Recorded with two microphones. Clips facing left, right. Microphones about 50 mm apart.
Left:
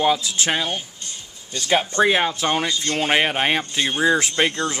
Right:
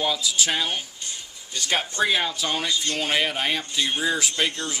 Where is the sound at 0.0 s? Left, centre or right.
Left.